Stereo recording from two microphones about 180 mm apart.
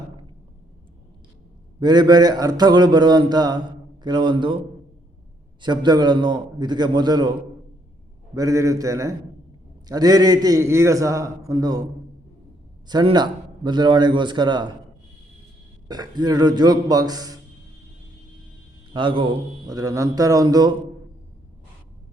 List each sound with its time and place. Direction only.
1.8 s a man's voice: 25° right (ahead or behind)
5.6 s a man's voice: 25° right (ahead or behind)
8.4 s a man's voice: 20° right (ahead or behind)
12.9 s a man's voice: 25° right (ahead or behind)
15.9 s a man's voice: 20° right (ahead or behind)
18.9 s a man's voice: 30° right (ahead or behind)